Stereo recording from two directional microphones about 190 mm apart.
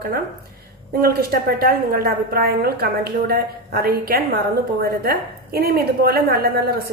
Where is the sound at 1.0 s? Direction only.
55° right (ahead or behind).